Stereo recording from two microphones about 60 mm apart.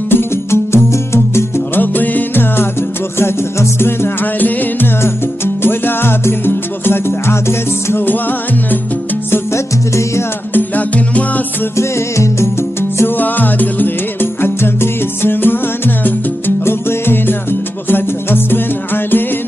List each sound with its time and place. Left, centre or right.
0.1 s music: left
1.8 s music: left
3.8 s music: left
10.5 s music: left
11.7 s music: left
13.2 s music: left